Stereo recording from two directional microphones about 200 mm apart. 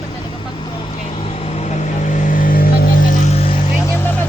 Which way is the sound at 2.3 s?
45° left (ahead or behind).